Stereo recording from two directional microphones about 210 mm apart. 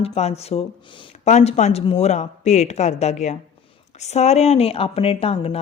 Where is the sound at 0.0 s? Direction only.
30° left (ahead or behind).